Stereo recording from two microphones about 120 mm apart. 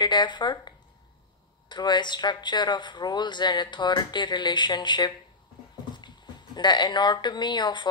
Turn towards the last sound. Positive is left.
turn(degrees=40)  # may be behind; listen again after turning